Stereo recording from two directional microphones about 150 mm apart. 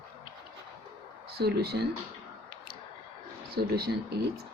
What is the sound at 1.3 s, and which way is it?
Speech, 90° right.